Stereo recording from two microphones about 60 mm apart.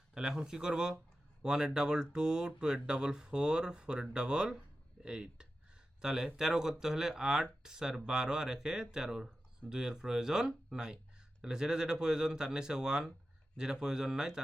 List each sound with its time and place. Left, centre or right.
0.1 s speech: centre